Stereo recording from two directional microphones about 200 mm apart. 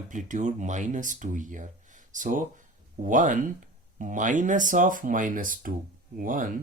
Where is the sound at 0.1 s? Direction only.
40° right (ahead or behind).